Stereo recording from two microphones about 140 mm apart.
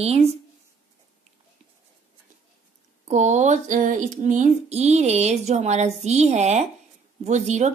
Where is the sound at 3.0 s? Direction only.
55° right (ahead or behind).